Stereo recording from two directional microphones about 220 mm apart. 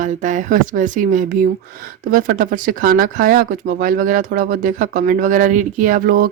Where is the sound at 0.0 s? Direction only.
35° right (ahead or behind).